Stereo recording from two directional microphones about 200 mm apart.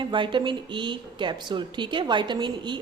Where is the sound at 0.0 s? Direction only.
25° right (ahead or behind).